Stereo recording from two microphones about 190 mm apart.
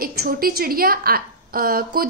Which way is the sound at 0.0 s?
50° right (ahead or behind).